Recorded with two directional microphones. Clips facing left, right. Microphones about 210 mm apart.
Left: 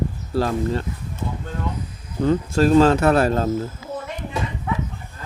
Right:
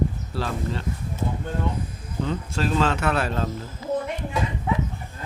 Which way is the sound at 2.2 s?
40° left (ahead or behind).